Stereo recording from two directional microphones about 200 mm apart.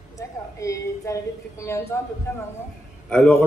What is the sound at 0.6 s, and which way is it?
A woman's voice, 15° left (ahead or behind).